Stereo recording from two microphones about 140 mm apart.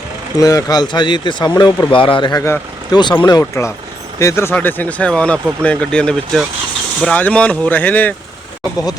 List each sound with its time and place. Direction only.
0.3 s speech: 25° left (ahead or behind)
2.4 s speech: 20° left (ahead or behind)
3.0 s speech: 30° left (ahead or behind); by 8.1 s 10° left (ahead or behind)